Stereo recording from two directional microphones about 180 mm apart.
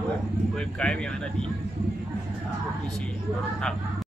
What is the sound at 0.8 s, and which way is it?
Speech, 5° left (ahead or behind).